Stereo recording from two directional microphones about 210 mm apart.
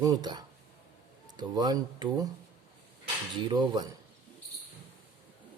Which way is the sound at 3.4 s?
20° right (ahead or behind).